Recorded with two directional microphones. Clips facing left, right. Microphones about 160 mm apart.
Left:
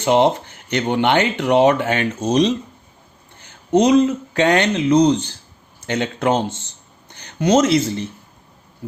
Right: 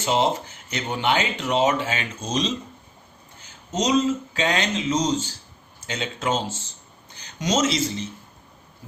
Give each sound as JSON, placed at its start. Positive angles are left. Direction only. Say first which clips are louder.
{"t": 0.0, "sound": "speech", "louder": "left 7 dB", "side_deg": 60}
{"t": 3.7, "sound": "speech", "louder": "left 8 dB", "side_deg": 60}